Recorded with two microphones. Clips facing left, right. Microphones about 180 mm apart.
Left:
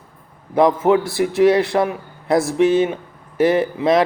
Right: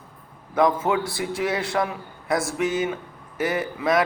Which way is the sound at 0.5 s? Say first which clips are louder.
Left 6 dB; 25° left (ahead or behind).